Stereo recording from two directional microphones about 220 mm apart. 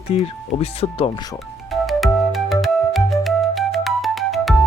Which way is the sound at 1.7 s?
Centre (ahead or behind).